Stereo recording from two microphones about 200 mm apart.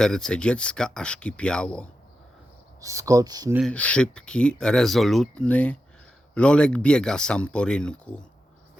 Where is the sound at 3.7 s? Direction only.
5° left (ahead or behind).